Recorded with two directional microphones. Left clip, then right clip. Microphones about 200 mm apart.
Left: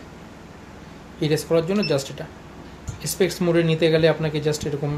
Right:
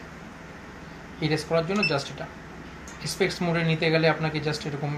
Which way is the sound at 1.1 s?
45° left (ahead or behind).